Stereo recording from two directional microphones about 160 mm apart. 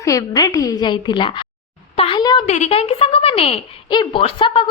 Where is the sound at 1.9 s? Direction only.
35° left (ahead or behind).